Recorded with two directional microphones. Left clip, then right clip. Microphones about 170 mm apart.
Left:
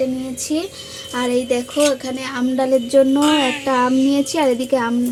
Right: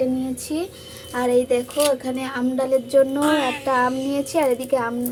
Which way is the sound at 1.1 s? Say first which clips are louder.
Even; 50° left (ahead or behind).